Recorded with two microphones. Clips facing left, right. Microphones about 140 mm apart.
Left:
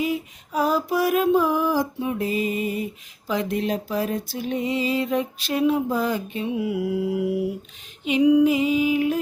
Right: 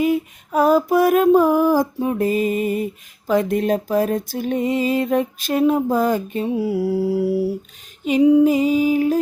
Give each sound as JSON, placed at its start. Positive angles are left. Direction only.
{"t": 0.0, "sound": "mantra", "side_deg": -50}
{"t": 8.0, "sound": "female singing", "side_deg": -35}